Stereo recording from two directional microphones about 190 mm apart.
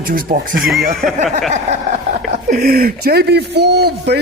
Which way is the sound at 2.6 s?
50° right (ahead or behind).